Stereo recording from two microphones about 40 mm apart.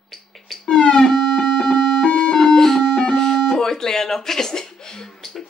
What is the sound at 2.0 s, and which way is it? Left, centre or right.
Music, left.